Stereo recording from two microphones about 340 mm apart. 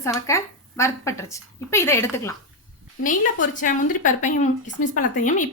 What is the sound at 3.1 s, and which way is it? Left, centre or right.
A woman's voice, left.